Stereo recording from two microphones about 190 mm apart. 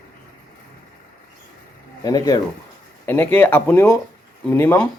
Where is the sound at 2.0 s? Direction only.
20° left (ahead or behind).